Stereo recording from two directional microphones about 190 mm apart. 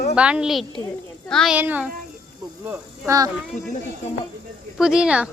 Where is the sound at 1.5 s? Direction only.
10° right (ahead or behind).